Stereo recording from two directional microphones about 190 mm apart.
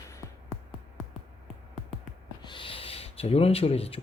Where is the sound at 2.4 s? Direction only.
25° left (ahead or behind).